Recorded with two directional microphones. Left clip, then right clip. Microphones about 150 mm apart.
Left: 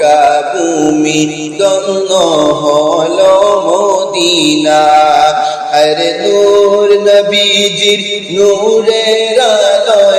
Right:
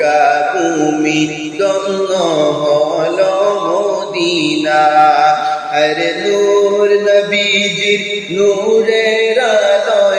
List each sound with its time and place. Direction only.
4.2 s mantra: 25° left (ahead or behind)
7.0 s mantra: 30° left (ahead or behind)
8.9 s music: 30° left (ahead or behind)